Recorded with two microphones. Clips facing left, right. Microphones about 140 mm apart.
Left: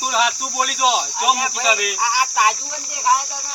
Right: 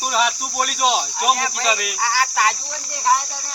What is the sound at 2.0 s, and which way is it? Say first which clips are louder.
Speech: left 1 dB; 15° left (ahead or behind).